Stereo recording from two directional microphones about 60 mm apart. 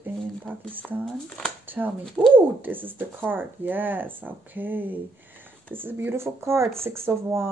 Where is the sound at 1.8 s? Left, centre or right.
Right.